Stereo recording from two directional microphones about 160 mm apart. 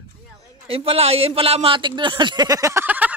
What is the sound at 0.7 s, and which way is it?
Speech, 35° right (ahead or behind).